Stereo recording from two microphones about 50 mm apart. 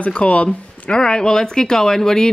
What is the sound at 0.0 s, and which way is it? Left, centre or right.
Speech, left.